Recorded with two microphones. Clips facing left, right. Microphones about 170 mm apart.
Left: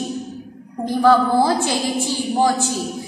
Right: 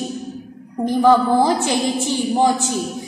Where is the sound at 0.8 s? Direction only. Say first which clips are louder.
Right 1 dB; 15° right (ahead or behind).